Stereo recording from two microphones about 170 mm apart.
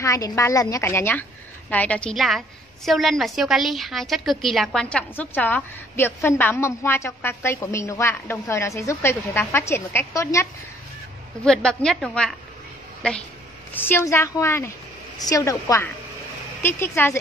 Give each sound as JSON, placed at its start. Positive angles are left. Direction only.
{"t": 0.0, "sound": "a woman's voice", "side_deg": 20}
{"t": 11.4, "sound": "a woman's voice", "side_deg": 5}
{"t": 13.7, "sound": "a woman's voice", "side_deg": 15}